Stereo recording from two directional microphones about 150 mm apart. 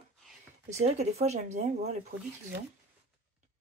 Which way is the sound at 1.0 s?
45° right (ahead or behind).